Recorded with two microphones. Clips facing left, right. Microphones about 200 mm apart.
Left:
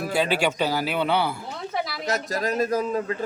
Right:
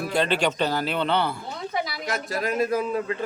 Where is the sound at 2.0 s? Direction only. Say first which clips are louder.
Left 2 dB; 40° left (ahead or behind).